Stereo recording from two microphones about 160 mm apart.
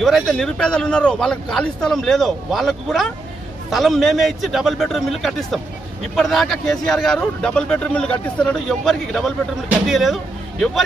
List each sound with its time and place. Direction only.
0.0 s speech: centre (ahead or behind)